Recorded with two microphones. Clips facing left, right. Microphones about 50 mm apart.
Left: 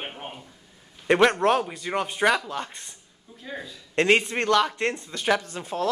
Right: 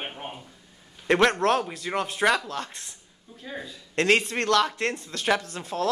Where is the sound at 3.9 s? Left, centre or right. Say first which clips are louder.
Left 1 dB; centre.